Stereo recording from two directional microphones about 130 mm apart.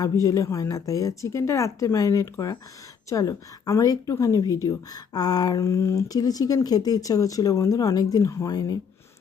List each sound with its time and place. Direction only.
0.0 s a woman's voice: 25° left (ahead or behind)